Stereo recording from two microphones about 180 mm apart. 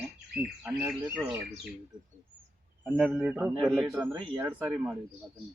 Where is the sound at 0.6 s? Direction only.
5° right (ahead or behind).